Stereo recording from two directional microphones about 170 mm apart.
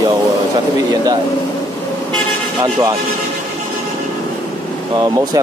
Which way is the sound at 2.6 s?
20° right (ahead or behind).